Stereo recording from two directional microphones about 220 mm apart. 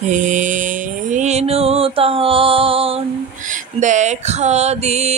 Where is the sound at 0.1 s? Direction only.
35° right (ahead or behind).